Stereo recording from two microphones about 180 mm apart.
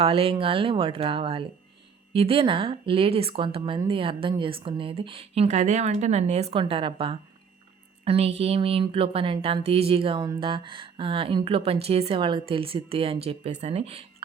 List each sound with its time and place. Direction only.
0.0 s a woman's voice: 30° right (ahead or behind)